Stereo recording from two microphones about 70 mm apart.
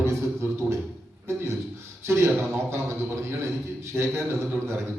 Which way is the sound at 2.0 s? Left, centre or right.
Right.